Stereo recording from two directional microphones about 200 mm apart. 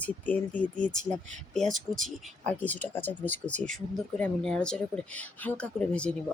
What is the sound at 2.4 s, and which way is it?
Speech, 10° left (ahead or behind).